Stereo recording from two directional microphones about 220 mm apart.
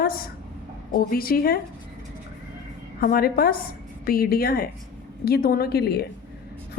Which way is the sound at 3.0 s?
45° left (ahead or behind).